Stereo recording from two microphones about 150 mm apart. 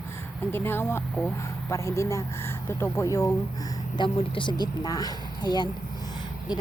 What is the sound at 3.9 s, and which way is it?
Speech, 35° left (ahead or behind).